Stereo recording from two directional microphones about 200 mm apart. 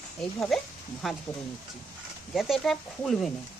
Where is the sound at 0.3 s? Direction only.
Centre (ahead or behind).